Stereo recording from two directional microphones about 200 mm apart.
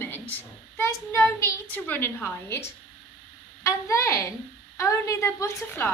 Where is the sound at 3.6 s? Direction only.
15° left (ahead or behind).